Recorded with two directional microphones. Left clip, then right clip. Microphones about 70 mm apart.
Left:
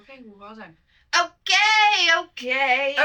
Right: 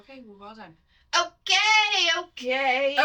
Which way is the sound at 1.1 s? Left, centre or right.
Left.